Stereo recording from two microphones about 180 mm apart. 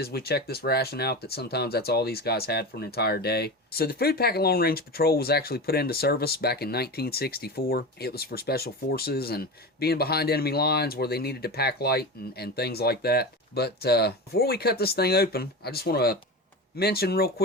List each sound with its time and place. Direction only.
0.0 s speech: 60° left (ahead or behind)